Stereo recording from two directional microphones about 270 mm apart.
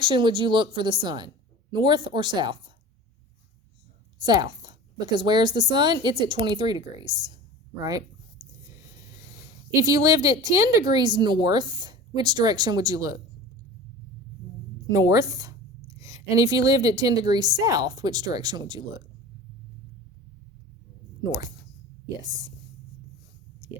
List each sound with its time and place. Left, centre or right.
0.0 s speech: centre
4.2 s a woman's voice: centre
9.8 s speech: centre
15.1 s speech: centre